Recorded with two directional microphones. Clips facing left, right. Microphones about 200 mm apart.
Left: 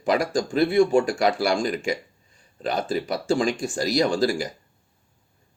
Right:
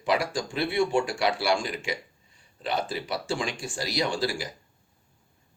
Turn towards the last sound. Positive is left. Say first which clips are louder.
# left 6 dB
turn(degrees=45)  # may be behind; listen again after turning